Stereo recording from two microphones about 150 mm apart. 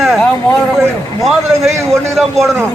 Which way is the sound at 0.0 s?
Centre (ahead or behind).